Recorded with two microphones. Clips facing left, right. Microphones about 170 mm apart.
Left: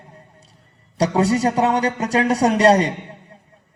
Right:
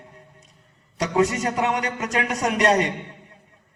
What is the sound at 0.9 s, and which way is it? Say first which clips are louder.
A man's voice: left 3 dB; 35° left (ahead or behind).